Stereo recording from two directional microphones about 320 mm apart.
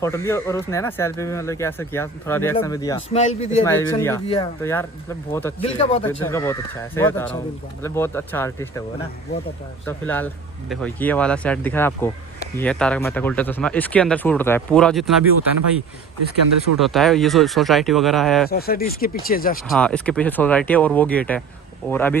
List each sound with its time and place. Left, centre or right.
0.0 s speech: centre
3.7 s speech: centre
9.8 s speech: centre
16.7 s speech: centre
18.4 s speech: left
19.7 s speech: centre